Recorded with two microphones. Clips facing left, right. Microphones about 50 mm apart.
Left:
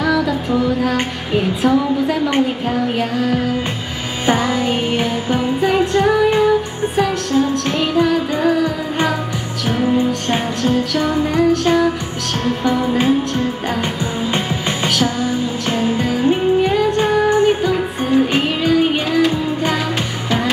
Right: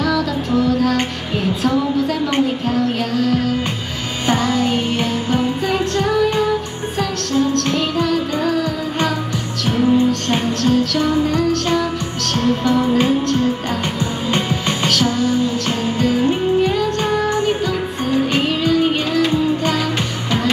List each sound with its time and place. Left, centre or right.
0.0 s music: centre